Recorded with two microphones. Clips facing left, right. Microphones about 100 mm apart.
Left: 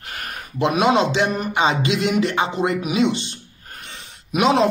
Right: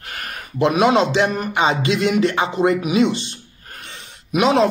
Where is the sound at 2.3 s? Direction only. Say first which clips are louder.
Right 3 dB; 35° right (ahead or behind).